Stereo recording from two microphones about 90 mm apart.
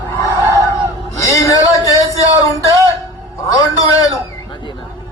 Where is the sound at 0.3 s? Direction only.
35° right (ahead or behind).